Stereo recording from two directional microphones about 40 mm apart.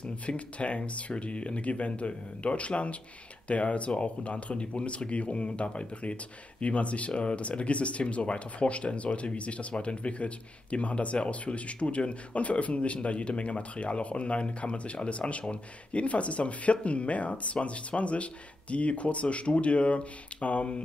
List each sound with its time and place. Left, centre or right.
0.3 s speech: left